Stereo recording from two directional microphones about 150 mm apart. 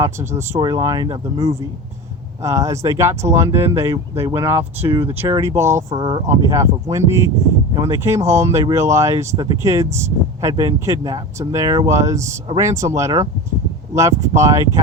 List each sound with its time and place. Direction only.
0.0 s speech: 15° right (ahead or behind)